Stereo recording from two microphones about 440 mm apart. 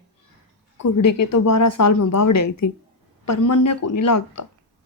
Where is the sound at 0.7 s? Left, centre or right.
Left.